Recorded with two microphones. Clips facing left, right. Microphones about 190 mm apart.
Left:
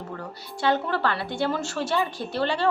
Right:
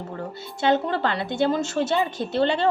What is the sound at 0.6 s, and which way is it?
A woman's voice, 20° right (ahead or behind).